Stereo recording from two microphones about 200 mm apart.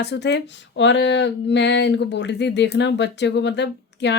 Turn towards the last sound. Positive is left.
turn(degrees=60)  # may be behind; listen again after turning